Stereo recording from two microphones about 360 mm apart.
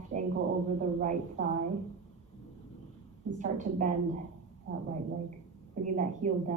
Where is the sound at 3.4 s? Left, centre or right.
Right.